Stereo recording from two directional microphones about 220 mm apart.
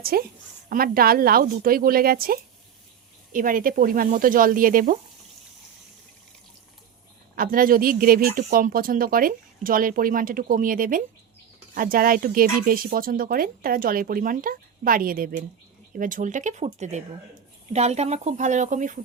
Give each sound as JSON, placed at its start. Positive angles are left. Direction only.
{"t": 0.0, "sound": "a woman's voice", "side_deg": -45}
{"t": 7.3, "sound": "speech", "side_deg": -40}